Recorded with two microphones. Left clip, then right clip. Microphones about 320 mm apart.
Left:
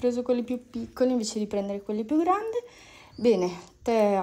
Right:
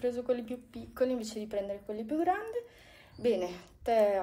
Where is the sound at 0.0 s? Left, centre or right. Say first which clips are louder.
Left 6 dB; centre.